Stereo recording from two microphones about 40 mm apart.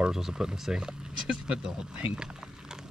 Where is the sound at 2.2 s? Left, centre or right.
Centre.